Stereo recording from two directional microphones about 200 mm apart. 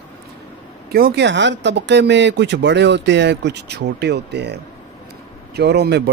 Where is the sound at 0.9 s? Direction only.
50° right (ahead or behind).